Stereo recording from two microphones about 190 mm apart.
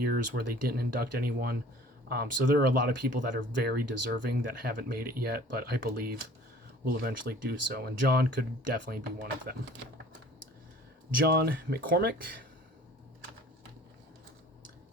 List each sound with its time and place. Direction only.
0.0 s speech: 55° right (ahead or behind)
11.2 s speech: 55° right (ahead or behind)